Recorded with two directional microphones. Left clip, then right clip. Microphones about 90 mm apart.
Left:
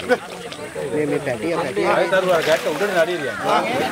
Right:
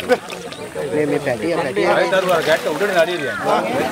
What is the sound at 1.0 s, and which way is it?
Speech, 25° right (ahead or behind).